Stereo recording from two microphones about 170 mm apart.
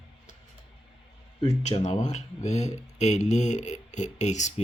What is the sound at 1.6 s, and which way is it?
Speech, 45° left (ahead or behind).